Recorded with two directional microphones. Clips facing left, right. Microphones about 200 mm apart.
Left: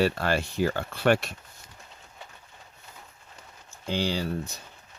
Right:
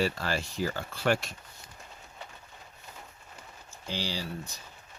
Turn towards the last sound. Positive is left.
turn(degrees=55)  # may be behind; listen again after turning